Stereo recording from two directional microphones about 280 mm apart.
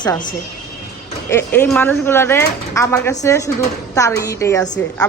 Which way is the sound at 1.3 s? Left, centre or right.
Centre.